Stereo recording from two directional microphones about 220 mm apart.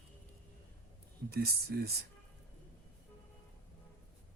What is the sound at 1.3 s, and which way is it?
Speech, 45° right (ahead or behind).